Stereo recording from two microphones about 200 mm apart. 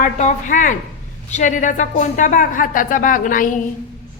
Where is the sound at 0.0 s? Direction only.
35° left (ahead or behind).